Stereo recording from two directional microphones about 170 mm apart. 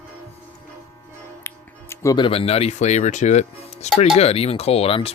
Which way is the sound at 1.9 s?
20° left (ahead or behind).